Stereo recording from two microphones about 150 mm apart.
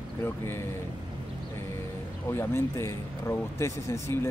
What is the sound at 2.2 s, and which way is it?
Speech, 15° left (ahead or behind).